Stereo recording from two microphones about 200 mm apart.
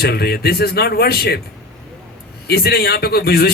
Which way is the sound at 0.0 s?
50° left (ahead or behind).